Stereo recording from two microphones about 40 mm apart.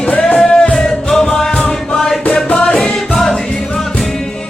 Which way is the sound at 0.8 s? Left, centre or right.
Centre.